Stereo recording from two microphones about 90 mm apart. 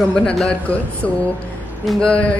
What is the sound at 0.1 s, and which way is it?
Speech, 10° left (ahead or behind).